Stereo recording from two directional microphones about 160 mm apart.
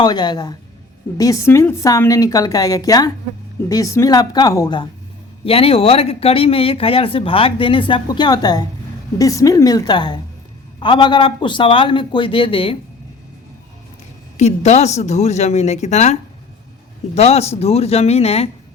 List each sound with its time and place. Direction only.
0.0 s a woman's voice: 25° left (ahead or behind)
5.5 s a woman's voice: 35° left (ahead or behind)
14.3 s speech: 45° left (ahead or behind)
17.2 s speech: 40° left (ahead or behind)